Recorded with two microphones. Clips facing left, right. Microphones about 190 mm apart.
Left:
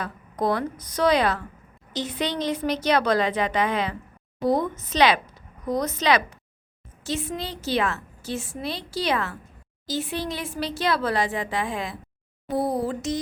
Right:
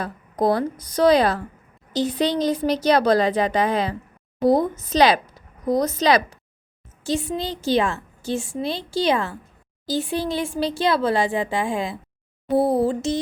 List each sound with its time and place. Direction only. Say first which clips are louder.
0.0 s a woman's voice: right 4 dB; 35° right (ahead or behind)